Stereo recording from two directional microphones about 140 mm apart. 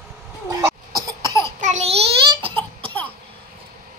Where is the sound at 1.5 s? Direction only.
55° right (ahead or behind).